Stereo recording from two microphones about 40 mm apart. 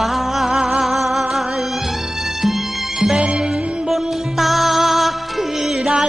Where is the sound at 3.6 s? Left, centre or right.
Right.